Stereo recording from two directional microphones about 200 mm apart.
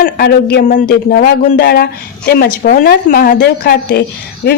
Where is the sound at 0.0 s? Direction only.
50° left (ahead or behind).